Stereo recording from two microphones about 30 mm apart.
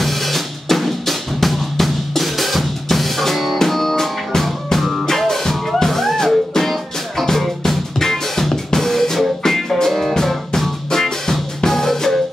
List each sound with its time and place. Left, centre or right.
0.0 s drum: centre
3.6 s music: centre
11.7 s drum: centre